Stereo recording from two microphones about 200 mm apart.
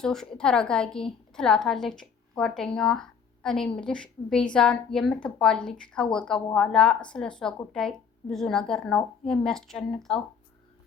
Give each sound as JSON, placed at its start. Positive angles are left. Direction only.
{"t": 0.0, "sound": "a woman's voice", "side_deg": 5}